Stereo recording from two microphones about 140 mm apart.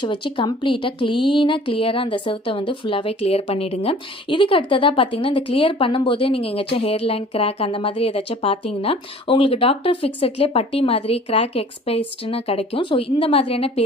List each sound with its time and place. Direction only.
0.0 s speech: 35° left (ahead or behind)